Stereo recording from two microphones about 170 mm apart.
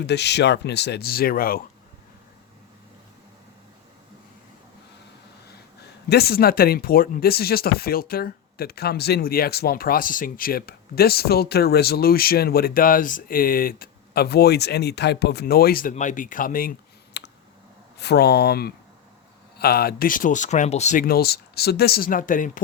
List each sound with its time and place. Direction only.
0.0 s speech: 85° left; by 1.6 s 60° left (ahead or behind)
6.1 s speech: 65° left (ahead or behind)
17.2 s clicking: 85° left
18.0 s speech: 75° left (ahead or behind); by 21.0 s 40° left (ahead or behind)
21.1 s speech: 65° left (ahead or behind)